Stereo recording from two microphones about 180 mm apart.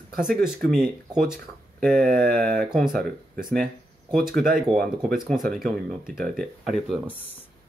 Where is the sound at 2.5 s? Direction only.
Centre (ahead or behind).